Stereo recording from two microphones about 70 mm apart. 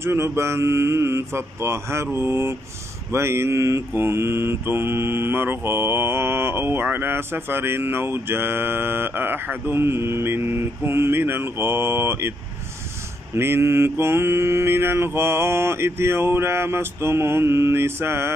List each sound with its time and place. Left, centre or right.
0.0 s mantra: right